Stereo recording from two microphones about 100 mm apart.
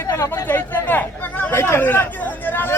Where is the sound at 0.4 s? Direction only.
20° left (ahead or behind).